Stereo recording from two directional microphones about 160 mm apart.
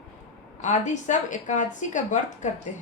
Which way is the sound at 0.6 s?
50° left (ahead or behind).